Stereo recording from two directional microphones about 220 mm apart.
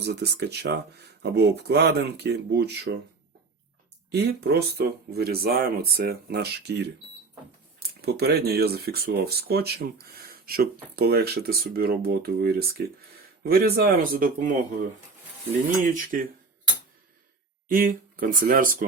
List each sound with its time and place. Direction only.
0.0 s speech: 50° right (ahead or behind)
4.1 s speech: 45° right (ahead or behind)
15.9 s speech: 40° right (ahead or behind)
17.7 s speech: 40° right (ahead or behind)